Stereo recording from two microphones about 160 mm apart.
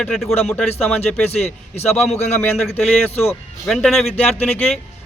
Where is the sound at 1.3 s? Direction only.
40° left (ahead or behind).